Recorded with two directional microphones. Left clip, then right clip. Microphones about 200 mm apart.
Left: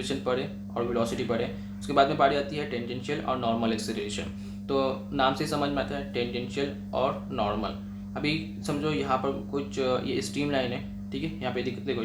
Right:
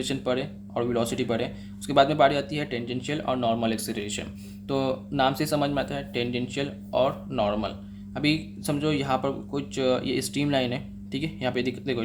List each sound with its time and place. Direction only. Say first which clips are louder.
0.0 s speech: right 1 dB; 40° right (ahead or behind)